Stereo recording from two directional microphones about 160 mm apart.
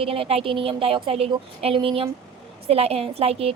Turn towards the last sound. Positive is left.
turn(degrees=-40)  # may be behind; listen again after turning